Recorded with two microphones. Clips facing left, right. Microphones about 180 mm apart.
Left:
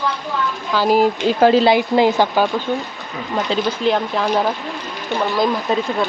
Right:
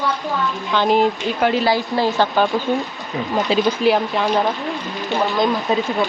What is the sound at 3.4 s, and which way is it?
Speech, 15° right (ahead or behind).